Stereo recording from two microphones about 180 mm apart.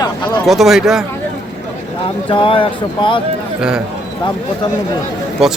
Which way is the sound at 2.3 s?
30° left (ahead or behind).